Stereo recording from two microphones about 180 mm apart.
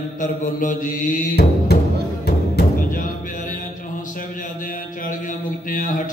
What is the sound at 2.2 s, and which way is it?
Music, 55° left (ahead or behind).